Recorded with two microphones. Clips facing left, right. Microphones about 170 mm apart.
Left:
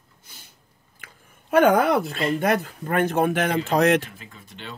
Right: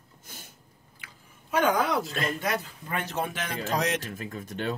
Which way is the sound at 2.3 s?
55° left (ahead or behind).